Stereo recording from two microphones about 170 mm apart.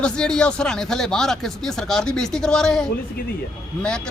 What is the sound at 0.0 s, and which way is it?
Speech, 5° left (ahead or behind).